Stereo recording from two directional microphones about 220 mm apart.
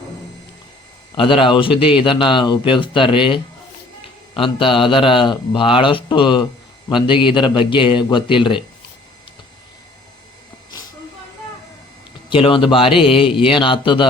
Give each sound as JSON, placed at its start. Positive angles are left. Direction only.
{"t": 1.1, "sound": "a man's voice", "side_deg": 25}
{"t": 12.3, "sound": "a man's voice", "side_deg": 25}